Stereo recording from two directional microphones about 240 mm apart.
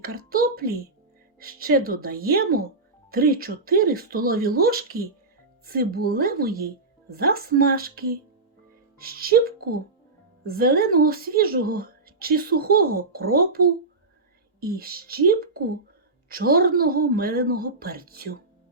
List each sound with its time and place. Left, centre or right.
0.0 s speech: right